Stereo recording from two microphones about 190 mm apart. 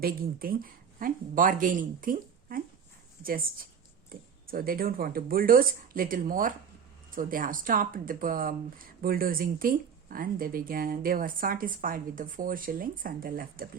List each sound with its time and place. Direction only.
0.0 s speech: 50° right (ahead or behind)